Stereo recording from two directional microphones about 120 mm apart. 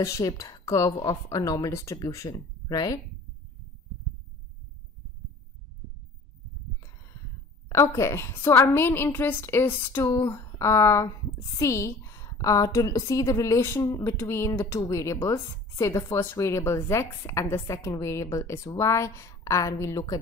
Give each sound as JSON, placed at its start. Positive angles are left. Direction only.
{"t": 0.0, "sound": "a woman's voice", "side_deg": 30}
{"t": 7.7, "sound": "a woman's voice", "side_deg": 25}